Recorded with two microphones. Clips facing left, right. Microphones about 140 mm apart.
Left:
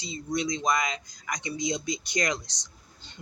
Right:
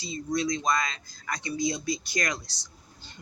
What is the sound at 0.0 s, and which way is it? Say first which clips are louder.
Speech: right 1 dB; 20° left (ahead or behind).